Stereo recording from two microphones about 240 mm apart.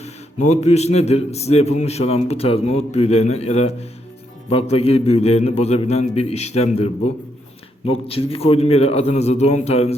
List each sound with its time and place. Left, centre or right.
0.0 s speech: left